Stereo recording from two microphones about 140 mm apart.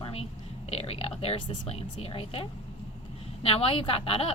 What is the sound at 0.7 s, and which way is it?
A woman's voice, 45° left (ahead or behind).